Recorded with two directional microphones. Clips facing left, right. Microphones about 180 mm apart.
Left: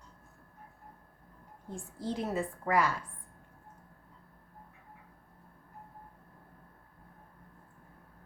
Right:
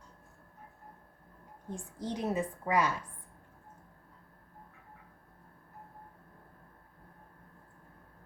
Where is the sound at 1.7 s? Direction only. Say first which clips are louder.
Left 1 dB; 20° right (ahead or behind).